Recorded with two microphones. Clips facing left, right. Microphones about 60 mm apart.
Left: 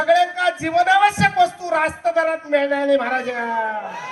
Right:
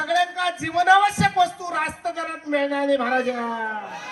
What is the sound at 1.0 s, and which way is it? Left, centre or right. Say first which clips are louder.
A man's voice: left 4 dB; left.